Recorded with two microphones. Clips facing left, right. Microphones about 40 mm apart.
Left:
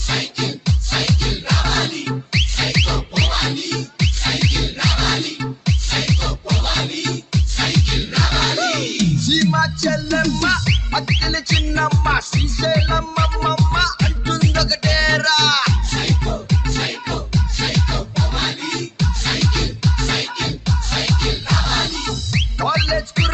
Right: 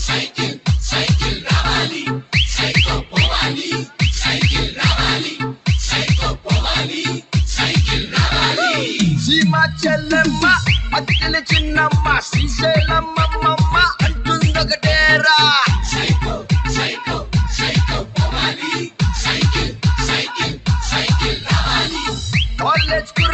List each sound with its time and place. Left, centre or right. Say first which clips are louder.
0.9 s music: right 2 dB; right
10.0 s music: right 5 dB; right
16.4 s music: right 3 dB; right
16.8 s music: right 2 dB; right